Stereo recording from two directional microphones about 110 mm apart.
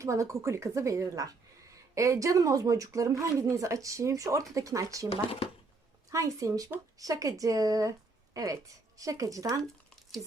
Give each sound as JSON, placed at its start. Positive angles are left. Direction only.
{"t": 0.0, "sound": "a woman's voice", "side_deg": -25}
{"t": 5.0, "sound": "speech", "side_deg": 60}
{"t": 6.1, "sound": "a woman's voice", "side_deg": -30}